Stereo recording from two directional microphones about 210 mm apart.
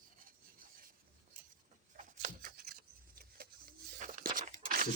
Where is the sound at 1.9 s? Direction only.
40° right (ahead or behind).